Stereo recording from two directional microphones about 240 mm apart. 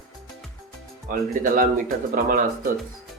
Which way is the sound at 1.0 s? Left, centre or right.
Right.